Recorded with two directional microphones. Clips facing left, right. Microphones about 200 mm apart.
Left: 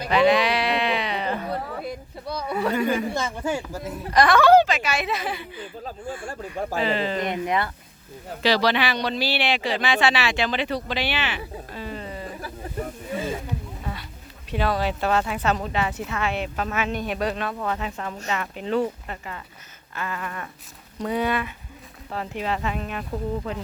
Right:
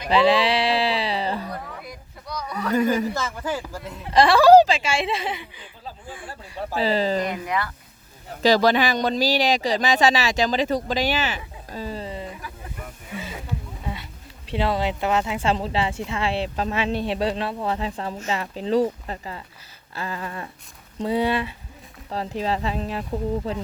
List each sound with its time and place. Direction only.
0.1 s sheep: 30° right (ahead or behind)
1.5 s a sound: 30° left (ahead or behind)
3.1 s speech: 25° left (ahead or behind)
4.1 s speech: 30° right (ahead or behind)
5.5 s speech: 50° left (ahead or behind)
6.8 s speech: 35° right (ahead or behind)
7.3 s speech: 25° left (ahead or behind)
8.4 s speech: 45° right (ahead or behind); by 12.3 s 25° right (ahead or behind)
12.4 s snake: 40° left (ahead or behind)
14.5 s speech: 25° right (ahead or behind)